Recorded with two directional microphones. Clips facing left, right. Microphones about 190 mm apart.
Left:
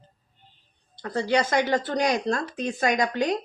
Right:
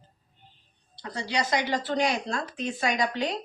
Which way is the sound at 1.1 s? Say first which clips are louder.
Left 5 dB; 50° left (ahead or behind).